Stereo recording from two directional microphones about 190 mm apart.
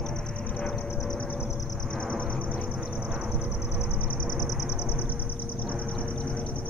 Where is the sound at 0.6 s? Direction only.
Centre (ahead or behind).